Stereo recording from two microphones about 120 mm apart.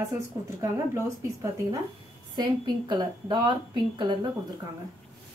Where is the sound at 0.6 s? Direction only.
25° right (ahead or behind).